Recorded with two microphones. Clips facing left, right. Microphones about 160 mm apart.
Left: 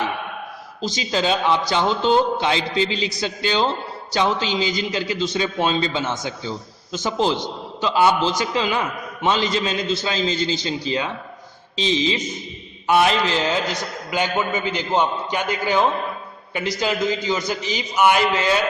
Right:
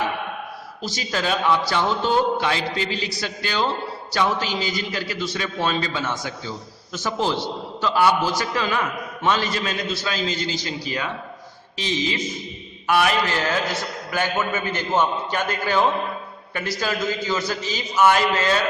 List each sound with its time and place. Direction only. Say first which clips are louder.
0.8 s a man's voice: left 4 dB; 20° left (ahead or behind)